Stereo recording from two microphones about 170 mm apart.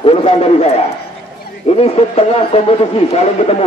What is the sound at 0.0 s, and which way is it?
Speech, 35° left (ahead or behind).